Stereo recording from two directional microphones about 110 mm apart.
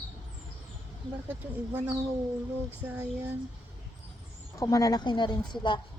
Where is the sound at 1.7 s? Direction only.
15° right (ahead or behind).